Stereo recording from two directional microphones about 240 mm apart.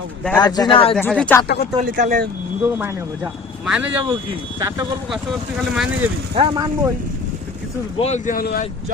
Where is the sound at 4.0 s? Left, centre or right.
Centre.